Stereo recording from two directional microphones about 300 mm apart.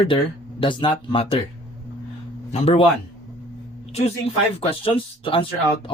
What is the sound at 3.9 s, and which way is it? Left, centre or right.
Speech, centre.